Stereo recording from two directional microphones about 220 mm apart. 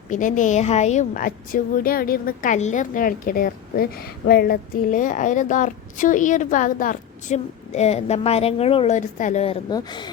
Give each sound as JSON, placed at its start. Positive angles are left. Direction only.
{"t": 0.1, "sound": "a woman's voice", "side_deg": 35}